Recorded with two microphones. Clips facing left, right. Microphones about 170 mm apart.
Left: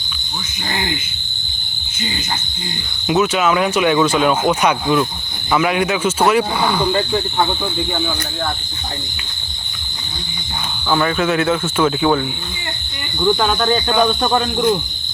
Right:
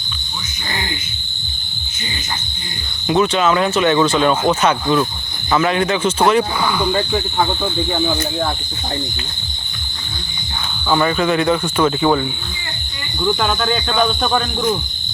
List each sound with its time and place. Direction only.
3.1 s speech: 5° left (ahead or behind)
6.9 s speech: 10° right (ahead or behind)
10.8 s speech: centre (ahead or behind)
13.2 s speech: 5° left (ahead or behind)
13.8 s speech: 15° left (ahead or behind)